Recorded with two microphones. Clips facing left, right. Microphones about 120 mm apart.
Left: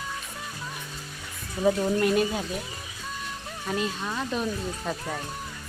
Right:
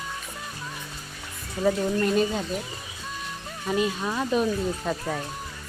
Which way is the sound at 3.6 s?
5° right (ahead or behind).